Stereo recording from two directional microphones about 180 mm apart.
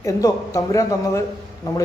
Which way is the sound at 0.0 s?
20° left (ahead or behind).